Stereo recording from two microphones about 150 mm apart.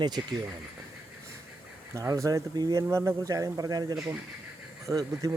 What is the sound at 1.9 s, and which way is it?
Speech, 20° right (ahead or behind).